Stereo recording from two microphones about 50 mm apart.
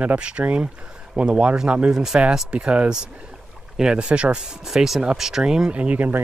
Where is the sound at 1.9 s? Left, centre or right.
Centre.